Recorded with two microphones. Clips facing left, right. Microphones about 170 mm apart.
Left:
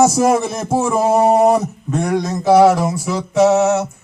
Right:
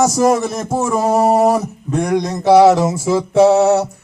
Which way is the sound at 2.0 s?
15° right (ahead or behind).